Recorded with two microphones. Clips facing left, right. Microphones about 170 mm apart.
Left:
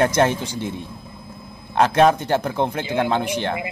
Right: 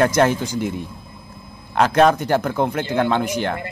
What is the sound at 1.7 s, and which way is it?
Speech, 25° left (ahead or behind).